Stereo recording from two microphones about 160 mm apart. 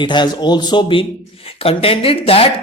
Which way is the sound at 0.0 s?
30° left (ahead or behind).